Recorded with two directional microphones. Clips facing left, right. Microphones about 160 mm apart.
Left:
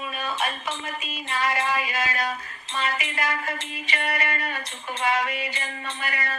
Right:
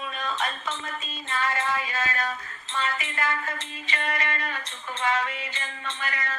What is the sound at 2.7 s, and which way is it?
Music, 10° left (ahead or behind).